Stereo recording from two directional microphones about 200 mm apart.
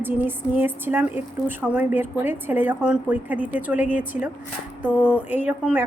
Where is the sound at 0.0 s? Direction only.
10° right (ahead or behind).